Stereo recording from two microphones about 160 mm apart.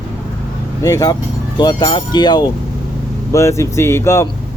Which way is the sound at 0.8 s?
20° left (ahead or behind).